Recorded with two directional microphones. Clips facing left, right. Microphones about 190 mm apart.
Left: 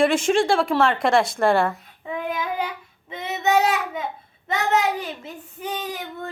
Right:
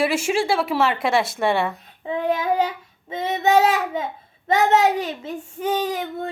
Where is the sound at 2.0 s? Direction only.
30° right (ahead or behind).